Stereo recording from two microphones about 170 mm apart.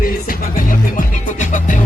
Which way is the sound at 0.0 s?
55° left (ahead or behind).